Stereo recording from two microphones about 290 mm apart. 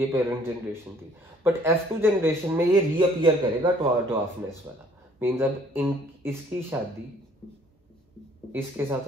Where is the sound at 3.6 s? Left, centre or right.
Centre.